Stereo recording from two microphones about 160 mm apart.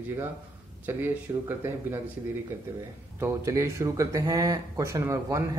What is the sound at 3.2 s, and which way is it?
Speech, 15° right (ahead or behind).